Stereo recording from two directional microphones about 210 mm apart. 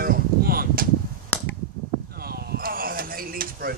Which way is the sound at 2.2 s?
45° right (ahead or behind).